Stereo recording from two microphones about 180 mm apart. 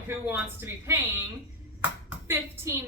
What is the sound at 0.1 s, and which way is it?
Speech, 10° right (ahead or behind).